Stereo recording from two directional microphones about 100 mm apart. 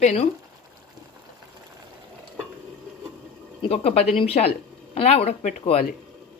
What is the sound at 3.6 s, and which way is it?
Speech, 85° left.